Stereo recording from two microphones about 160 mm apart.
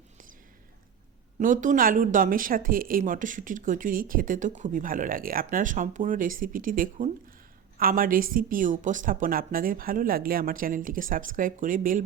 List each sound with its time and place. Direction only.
1.4 s speech: 55° right (ahead or behind)